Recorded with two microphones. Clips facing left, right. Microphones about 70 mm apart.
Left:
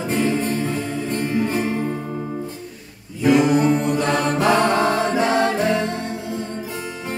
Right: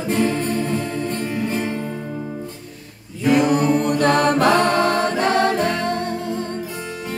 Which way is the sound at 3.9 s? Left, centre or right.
Right.